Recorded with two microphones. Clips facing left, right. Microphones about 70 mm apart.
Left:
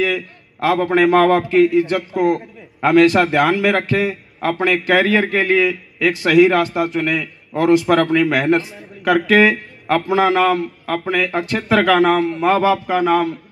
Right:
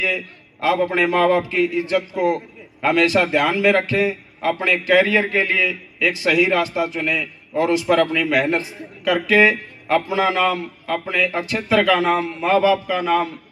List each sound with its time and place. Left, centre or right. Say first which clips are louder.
0.0 s a man's voice: left 4 dB; left